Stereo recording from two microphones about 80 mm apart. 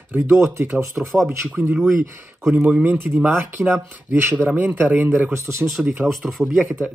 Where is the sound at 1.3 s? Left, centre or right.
Right.